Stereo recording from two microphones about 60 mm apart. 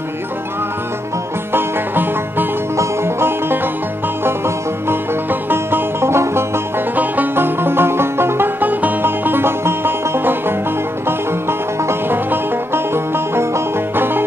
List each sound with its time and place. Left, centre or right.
1.5 s music: right
2.7 s music: right
4.8 s music: right
7.0 s music: right